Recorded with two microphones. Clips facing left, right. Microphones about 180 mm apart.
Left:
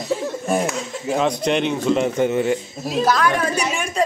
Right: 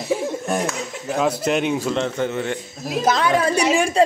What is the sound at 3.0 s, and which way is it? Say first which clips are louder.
A woman's voice: right 1 dB; 25° right (ahead or behind).